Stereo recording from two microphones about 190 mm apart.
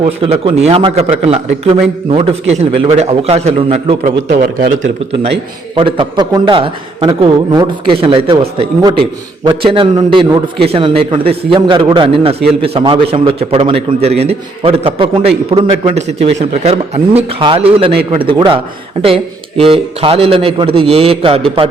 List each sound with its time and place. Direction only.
0.0 s a man's voice: 30° right (ahead or behind)
5.7 s a man's voice: 25° right (ahead or behind)